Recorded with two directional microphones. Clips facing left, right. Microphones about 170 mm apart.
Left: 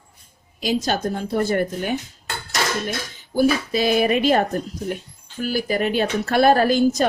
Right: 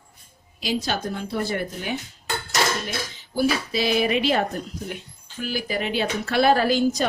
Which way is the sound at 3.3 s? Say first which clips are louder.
Left 4 dB; 50° left (ahead or behind).